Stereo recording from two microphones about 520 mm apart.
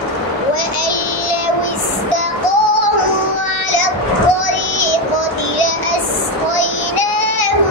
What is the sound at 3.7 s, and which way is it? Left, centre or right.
Child singing, left.